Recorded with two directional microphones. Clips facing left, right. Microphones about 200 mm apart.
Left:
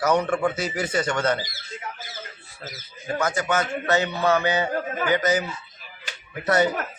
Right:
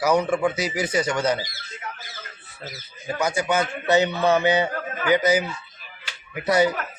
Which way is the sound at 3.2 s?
15° right (ahead or behind).